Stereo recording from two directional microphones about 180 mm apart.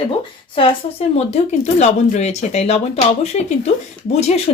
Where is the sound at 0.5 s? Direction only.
30° left (ahead or behind).